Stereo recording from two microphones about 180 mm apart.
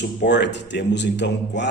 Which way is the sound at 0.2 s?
75° left (ahead or behind).